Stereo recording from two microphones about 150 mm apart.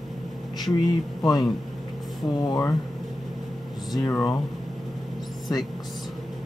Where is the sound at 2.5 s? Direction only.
20° left (ahead or behind).